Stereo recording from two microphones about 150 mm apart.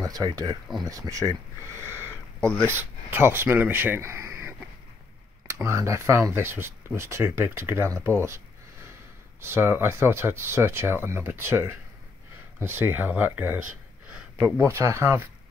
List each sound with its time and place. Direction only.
0.0 s speech: 25° right (ahead or behind)
9.4 s speech: 15° right (ahead or behind)